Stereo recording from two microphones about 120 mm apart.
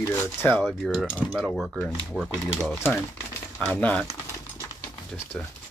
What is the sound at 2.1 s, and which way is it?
Speech, 5° right (ahead or behind).